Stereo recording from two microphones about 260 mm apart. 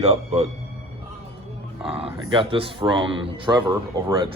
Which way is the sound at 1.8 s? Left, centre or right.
Centre.